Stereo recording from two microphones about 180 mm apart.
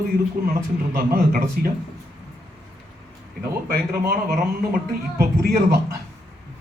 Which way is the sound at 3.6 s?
55° right (ahead or behind).